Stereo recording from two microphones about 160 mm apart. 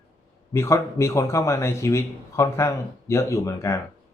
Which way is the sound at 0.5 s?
15° left (ahead or behind).